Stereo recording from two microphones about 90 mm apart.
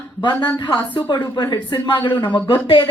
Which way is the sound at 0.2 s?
50° left (ahead or behind).